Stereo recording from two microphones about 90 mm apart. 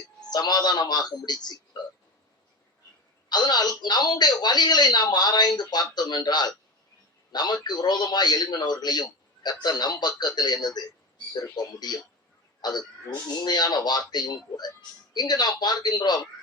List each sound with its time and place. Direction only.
0.3 s speech: 50° left (ahead or behind)
3.2 s speech: 50° left (ahead or behind)